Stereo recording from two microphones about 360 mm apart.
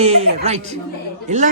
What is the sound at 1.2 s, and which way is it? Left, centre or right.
Speech, centre.